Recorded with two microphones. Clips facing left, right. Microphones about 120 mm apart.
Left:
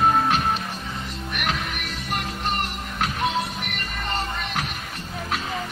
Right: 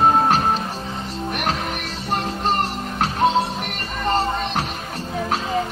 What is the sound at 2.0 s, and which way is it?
Music, 30° right (ahead or behind).